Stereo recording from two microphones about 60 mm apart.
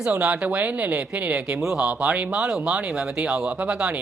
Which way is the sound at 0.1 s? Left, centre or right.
Right.